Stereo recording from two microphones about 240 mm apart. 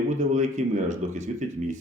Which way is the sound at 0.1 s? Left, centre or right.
Right.